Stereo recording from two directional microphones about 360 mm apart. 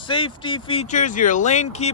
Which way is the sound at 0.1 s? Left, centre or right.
Centre.